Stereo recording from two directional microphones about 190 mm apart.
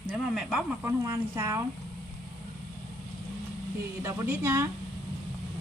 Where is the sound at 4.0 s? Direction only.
15° right (ahead or behind).